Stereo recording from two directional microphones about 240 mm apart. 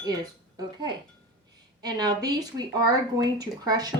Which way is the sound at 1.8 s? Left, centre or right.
Centre.